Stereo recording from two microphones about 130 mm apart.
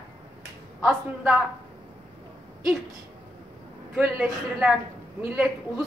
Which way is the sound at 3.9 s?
10° right (ahead or behind).